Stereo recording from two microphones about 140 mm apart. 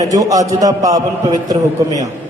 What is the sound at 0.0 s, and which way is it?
A man's voice, 25° right (ahead or behind).